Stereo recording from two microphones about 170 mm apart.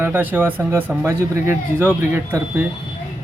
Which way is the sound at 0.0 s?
10° right (ahead or behind).